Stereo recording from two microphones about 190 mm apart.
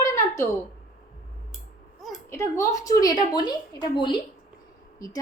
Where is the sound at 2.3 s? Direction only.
15° left (ahead or behind).